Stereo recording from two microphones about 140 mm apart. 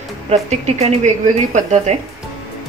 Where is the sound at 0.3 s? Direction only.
55° right (ahead or behind).